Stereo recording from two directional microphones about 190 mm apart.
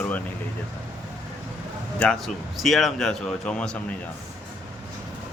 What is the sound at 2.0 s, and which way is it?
A man's voice, 5° left (ahead or behind).